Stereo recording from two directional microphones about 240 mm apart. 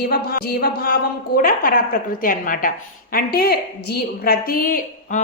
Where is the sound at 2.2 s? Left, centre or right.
Left.